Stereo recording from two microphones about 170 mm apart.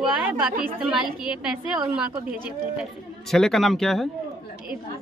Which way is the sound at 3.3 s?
Centre (ahead or behind).